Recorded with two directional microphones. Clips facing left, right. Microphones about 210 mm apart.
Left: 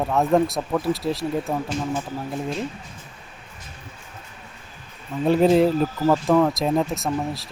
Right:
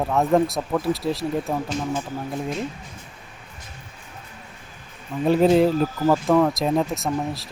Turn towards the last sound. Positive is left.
turn(degrees=0)  # may be behind; listen again after turning